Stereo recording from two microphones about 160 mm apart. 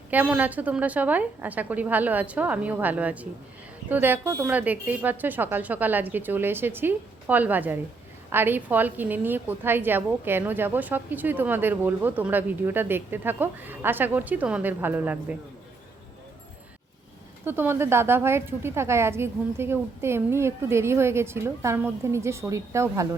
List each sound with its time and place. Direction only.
0.1 s a woman's voice: 10° right (ahead or behind)
17.4 s a woman's voice: 15° right (ahead or behind)